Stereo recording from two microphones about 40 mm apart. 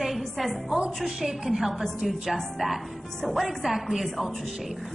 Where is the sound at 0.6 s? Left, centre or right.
Right.